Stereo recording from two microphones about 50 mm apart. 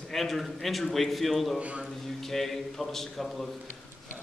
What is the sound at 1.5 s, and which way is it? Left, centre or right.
Speech, right.